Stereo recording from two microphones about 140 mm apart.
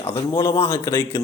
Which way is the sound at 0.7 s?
20° left (ahead or behind).